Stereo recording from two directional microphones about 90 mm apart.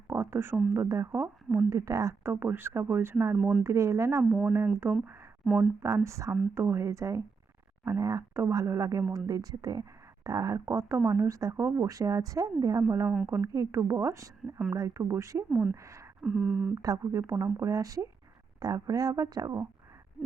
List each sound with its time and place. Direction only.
0.1 s speech: 30° right (ahead or behind)
1.1 s speech: 20° right (ahead or behind)
1.7 s speech: 35° right (ahead or behind)
2.3 s speech: 25° right (ahead or behind)
3.3 s a sound: 5° right (ahead or behind)
3.6 s speech: 30° right (ahead or behind)
4.2 s a sound: 5° right (ahead or behind)
4.8 s speech: 25° right (ahead or behind)
5.8 s speech: 35° right (ahead or behind)
11.5 s speech: 25° right (ahead or behind)
11.9 s speech: 40° right (ahead or behind)
16.2 s a sound: 5° right (ahead or behind)
16.7 s speech: 40° right (ahead or behind)